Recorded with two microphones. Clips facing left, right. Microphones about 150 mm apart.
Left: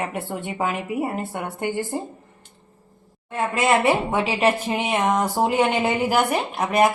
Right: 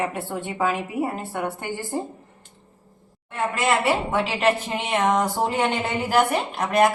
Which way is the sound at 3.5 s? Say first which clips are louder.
Left 3 dB; 15° left (ahead or behind).